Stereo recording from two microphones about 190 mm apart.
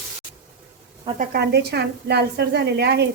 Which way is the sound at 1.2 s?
55° right (ahead or behind).